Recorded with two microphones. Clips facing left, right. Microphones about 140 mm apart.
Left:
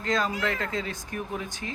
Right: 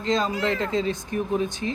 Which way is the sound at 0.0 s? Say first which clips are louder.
Right 3 dB; 25° right (ahead or behind).